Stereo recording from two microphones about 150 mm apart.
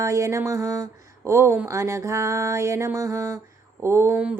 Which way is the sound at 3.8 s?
15° right (ahead or behind).